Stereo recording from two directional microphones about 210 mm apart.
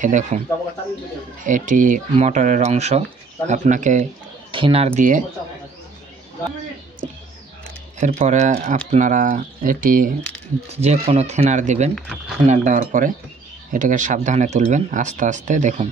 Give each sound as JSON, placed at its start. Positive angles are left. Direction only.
{"t": 0.0, "sound": "speech", "side_deg": -35}
{"t": 1.4, "sound": "speech", "side_deg": -40}
{"t": 4.5, "sound": "speech", "side_deg": -25}
{"t": 8.0, "sound": "speech", "side_deg": -35}
{"t": 10.7, "sound": "speech", "side_deg": -30}
{"t": 11.9, "sound": "speech", "side_deg": 0}
{"t": 12.4, "sound": "speech", "side_deg": -35}